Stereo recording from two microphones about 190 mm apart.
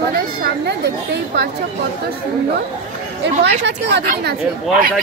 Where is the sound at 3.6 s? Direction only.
65° right (ahead or behind).